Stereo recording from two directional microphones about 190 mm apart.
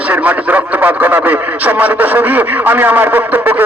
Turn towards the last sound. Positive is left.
turn(degrees=-10)  # may be behind; listen again after turning